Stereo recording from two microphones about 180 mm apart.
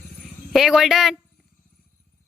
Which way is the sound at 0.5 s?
Centre (ahead or behind).